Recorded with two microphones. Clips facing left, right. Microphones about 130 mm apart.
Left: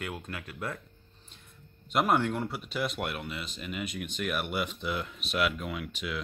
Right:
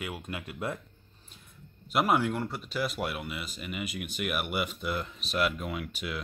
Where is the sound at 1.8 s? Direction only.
5° right (ahead or behind).